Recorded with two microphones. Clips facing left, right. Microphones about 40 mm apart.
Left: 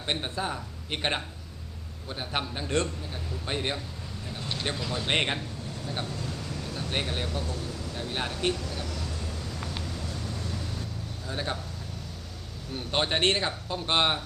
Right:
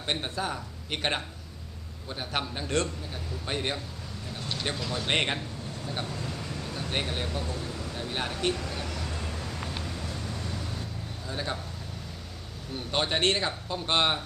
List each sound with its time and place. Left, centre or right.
0.0 s a man's voice: centre
6.1 s vehicle: centre
6.9 s a man's voice: centre
7.9 s a sound: centre
8.6 s vehicle: right
9.9 s vehicle: centre
11.3 s speech: centre
12.7 s a man's voice: centre